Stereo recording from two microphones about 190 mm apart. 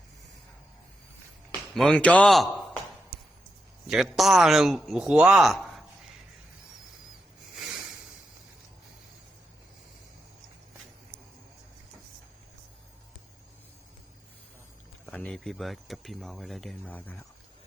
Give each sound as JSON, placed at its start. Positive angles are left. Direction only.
{"t": 1.7, "sound": "speech", "side_deg": 5}
{"t": 3.8, "sound": "speech", "side_deg": -5}
{"t": 7.5, "sound": "a sound", "side_deg": -5}
{"t": 15.0, "sound": "speech", "side_deg": 10}